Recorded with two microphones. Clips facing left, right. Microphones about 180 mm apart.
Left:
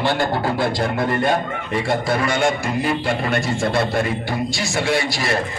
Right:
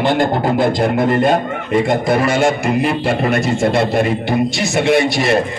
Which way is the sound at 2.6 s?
65° right (ahead or behind).